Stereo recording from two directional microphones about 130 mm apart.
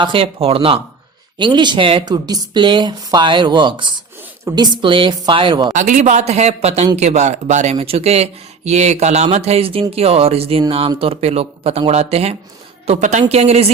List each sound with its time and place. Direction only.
0.0 s speech: 45° right (ahead or behind)
5.7 s speech: 75° right (ahead or behind); by 12.4 s 55° right (ahead or behind)
12.9 s speech: 65° right (ahead or behind)